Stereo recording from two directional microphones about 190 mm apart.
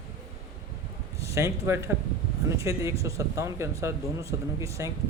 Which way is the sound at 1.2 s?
15° right (ahead or behind).